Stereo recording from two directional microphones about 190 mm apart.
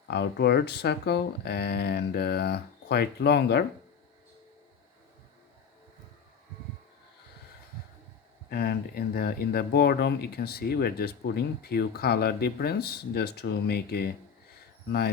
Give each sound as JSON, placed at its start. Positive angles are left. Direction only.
{"t": 0.1, "sound": "speech", "side_deg": 60}
{"t": 8.4, "sound": "speech", "side_deg": 55}